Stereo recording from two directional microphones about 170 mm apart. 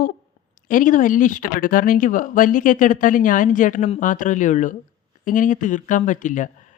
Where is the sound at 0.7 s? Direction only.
50° left (ahead or behind).